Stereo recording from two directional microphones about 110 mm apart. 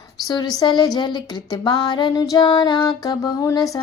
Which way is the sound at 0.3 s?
40° left (ahead or behind).